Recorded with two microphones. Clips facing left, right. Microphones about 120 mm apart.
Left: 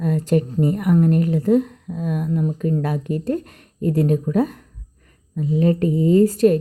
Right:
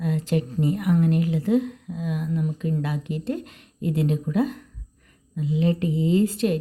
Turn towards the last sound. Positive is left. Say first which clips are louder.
# left 7 dB
turn(degrees=45)  # may be behind; listen again after turning